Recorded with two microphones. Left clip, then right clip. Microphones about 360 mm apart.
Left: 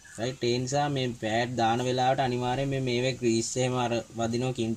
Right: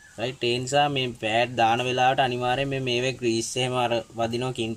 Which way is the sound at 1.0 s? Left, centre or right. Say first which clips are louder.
Right 5 dB; right.